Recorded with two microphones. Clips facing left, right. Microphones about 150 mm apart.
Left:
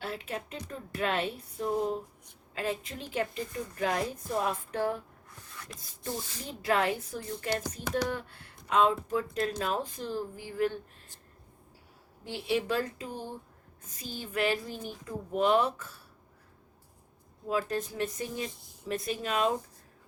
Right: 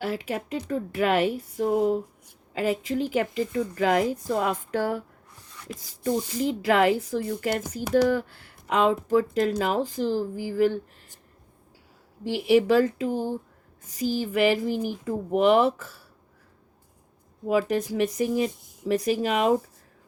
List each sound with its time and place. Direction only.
0.0 s speech: 90° right
12.2 s speech: 90° right
17.5 s speech: 90° right